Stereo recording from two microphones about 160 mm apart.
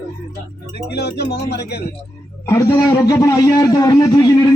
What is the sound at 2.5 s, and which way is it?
A man's voice, 20° left (ahead or behind).